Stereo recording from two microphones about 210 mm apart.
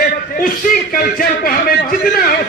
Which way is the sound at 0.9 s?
45° left (ahead or behind).